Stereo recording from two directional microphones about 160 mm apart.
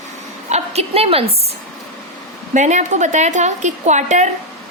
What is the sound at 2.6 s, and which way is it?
A woman's voice, 50° right (ahead or behind).